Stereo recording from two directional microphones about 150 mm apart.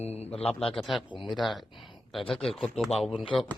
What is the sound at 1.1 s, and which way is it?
Mantra, 30° left (ahead or behind).